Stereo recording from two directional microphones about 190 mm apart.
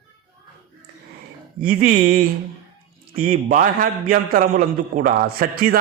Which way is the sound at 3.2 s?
45° right (ahead or behind).